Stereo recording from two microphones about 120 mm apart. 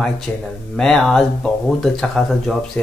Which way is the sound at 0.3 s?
15° left (ahead or behind).